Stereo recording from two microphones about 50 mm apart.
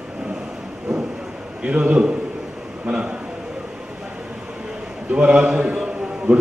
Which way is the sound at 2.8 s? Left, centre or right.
Right.